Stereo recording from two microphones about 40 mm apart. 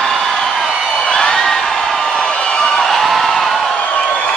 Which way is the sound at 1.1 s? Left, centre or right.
Centre.